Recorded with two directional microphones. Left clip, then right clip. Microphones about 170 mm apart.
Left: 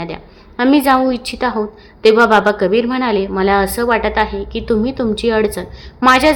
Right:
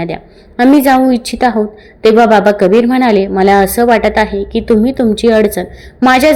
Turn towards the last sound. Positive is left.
turn(degrees=-25)  # may be behind; listen again after turning